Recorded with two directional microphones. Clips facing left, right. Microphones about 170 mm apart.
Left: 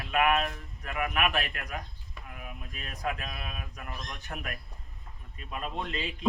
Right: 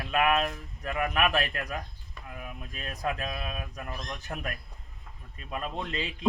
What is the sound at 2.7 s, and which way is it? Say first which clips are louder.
Speech: right 2 dB; 40° right (ahead or behind).